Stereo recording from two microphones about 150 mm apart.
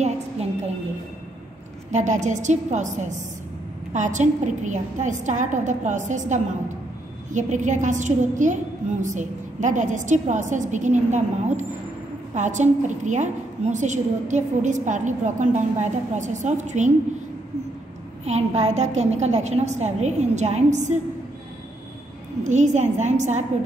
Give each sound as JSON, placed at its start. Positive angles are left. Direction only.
{"t": 1.9, "sound": "a woman's voice", "side_deg": -55}
{"t": 18.2, "sound": "a woman's voice", "side_deg": -45}
{"t": 22.4, "sound": "a woman's voice", "side_deg": -55}